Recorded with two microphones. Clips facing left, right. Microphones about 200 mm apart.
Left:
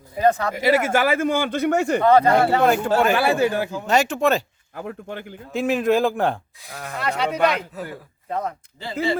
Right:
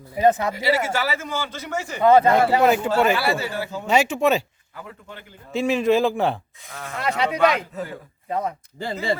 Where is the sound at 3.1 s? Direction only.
55° left (ahead or behind).